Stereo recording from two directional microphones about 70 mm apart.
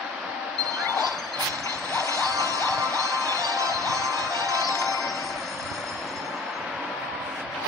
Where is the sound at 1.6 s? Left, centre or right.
Right.